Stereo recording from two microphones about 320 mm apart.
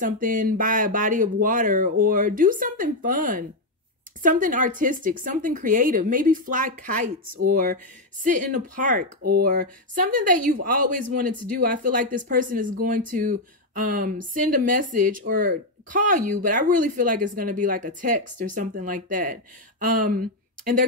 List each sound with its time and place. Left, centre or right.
0.0 s speech: right